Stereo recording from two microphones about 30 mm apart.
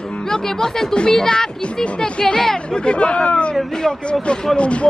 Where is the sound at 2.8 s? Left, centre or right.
Left.